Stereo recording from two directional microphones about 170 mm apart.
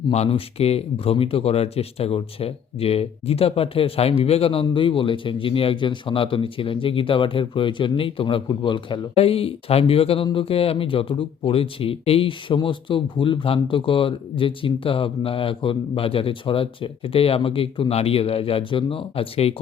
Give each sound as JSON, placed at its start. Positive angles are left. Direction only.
{"t": 0.1, "sound": "speech", "side_deg": 35}